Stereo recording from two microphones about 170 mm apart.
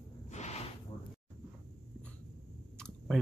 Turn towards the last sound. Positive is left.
turn(degrees=5)  # may be behind; listen again after turning